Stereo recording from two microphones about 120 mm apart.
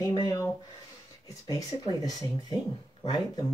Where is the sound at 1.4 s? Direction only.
30° left (ahead or behind).